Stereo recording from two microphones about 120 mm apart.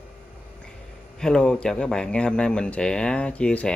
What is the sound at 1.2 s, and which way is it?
Speech, 5° left (ahead or behind).